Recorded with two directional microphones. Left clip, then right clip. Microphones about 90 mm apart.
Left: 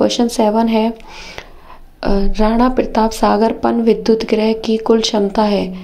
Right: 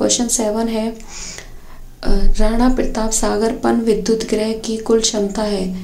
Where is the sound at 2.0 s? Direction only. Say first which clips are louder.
Left 5 dB; 30° left (ahead or behind).